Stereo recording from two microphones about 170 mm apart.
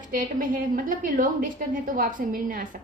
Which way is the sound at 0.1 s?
55° right (ahead or behind).